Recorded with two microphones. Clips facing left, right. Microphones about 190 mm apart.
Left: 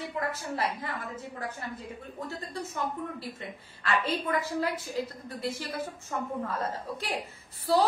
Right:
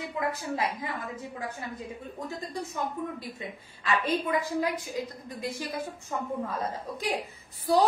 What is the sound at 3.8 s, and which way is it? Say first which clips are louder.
A woman's voice: right 2 dB; 15° right (ahead or behind).